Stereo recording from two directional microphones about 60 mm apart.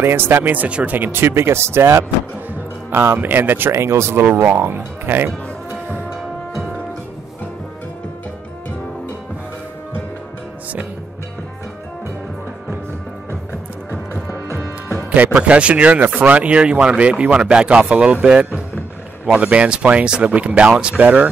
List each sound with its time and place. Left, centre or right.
0.0 s speech: right
0.9 s speech: right
3.2 s speech: right
4.2 s speech: right
15.0 s speech: right